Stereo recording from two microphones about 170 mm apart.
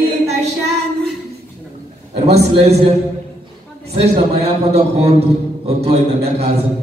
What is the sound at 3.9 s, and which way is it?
A man's voice, 35° right (ahead or behind).